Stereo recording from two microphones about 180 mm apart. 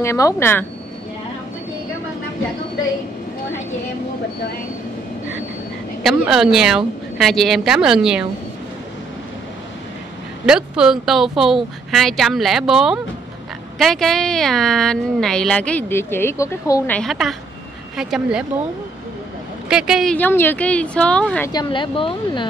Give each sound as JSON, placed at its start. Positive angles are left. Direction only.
{"t": 0.0, "sound": "speech", "side_deg": 15}
{"t": 6.0, "sound": "speech", "side_deg": 0}
{"t": 10.4, "sound": "speech", "side_deg": -5}
{"t": 16.9, "sound": "speech", "side_deg": 0}
{"t": 19.7, "sound": "speech", "side_deg": -5}
{"t": 20.2, "sound": "speech", "side_deg": 10}
{"t": 21.5, "sound": "speech", "side_deg": 25}